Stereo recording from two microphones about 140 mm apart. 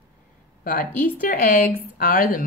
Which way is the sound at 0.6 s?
75° left (ahead or behind).